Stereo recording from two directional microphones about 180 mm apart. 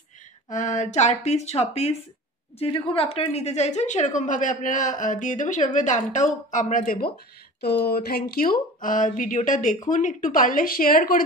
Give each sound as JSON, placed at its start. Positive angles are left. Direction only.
{"t": 0.5, "sound": "a woman's voice", "side_deg": 45}
{"t": 7.6, "sound": "a woman's voice", "side_deg": 65}